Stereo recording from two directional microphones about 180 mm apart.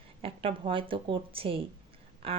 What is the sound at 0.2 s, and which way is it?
A woman's voice, 30° right (ahead or behind).